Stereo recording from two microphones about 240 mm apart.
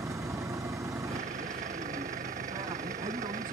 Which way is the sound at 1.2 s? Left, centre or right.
Right.